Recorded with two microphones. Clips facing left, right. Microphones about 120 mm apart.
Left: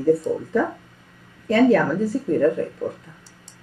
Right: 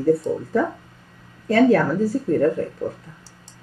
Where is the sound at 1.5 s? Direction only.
35° right (ahead or behind).